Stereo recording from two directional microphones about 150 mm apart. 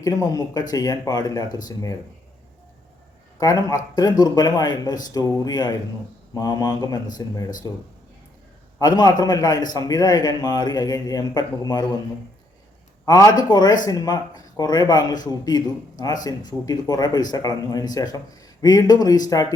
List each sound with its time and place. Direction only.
0.0 s a man's voice: 25° left (ahead or behind)
3.4 s a man's voice: 25° left (ahead or behind)
13.1 s a man's voice: 25° left (ahead or behind)